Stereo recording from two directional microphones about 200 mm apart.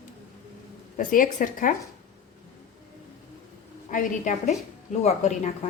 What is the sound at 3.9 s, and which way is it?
Speech, 40° left (ahead or behind).